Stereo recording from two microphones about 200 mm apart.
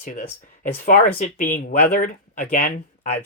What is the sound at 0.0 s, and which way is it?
Speech, 45° left (ahead or behind).